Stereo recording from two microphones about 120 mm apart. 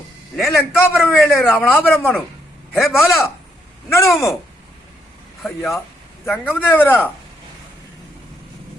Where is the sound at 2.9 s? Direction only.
20° left (ahead or behind).